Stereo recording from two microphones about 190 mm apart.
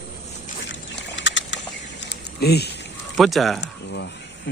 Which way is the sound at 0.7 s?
70° left (ahead or behind).